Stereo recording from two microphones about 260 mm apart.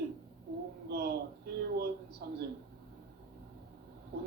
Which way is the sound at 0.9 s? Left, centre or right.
Right.